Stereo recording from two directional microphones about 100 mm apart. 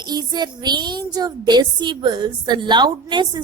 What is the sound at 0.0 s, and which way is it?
Speech, 40° right (ahead or behind).